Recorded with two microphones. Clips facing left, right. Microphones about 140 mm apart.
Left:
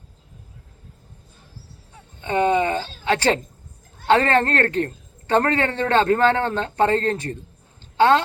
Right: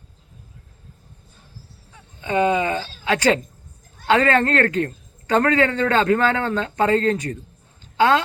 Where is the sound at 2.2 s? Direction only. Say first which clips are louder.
Even; 30° left (ahead or behind).